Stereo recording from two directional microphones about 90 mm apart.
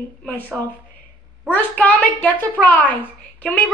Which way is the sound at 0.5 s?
15° left (ahead or behind).